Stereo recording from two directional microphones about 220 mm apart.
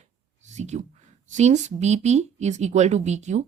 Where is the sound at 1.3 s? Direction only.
30° right (ahead or behind).